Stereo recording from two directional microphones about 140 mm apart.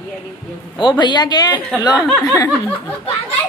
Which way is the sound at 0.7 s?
35° left (ahead or behind).